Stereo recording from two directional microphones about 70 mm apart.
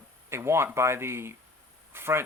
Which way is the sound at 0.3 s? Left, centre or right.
Right.